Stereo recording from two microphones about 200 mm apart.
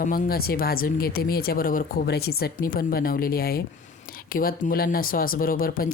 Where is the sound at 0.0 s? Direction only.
45° left (ahead or behind).